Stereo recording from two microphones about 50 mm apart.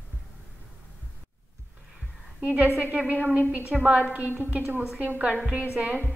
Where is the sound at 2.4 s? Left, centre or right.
Right.